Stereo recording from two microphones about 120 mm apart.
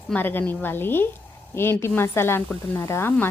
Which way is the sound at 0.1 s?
15° left (ahead or behind).